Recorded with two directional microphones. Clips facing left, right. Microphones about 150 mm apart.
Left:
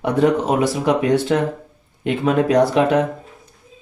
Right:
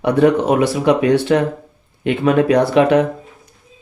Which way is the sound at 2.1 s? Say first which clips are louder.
Right 3 dB; 70° right (ahead or behind).